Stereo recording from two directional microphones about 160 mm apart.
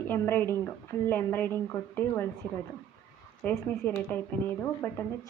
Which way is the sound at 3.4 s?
10° left (ahead or behind).